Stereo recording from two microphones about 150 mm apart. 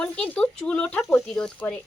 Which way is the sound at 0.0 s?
5° left (ahead or behind).